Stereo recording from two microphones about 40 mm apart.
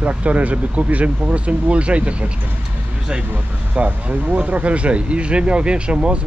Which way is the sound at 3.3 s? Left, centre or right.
Right.